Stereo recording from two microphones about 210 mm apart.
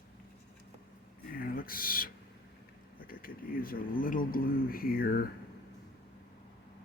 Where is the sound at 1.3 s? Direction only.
45° left (ahead or behind).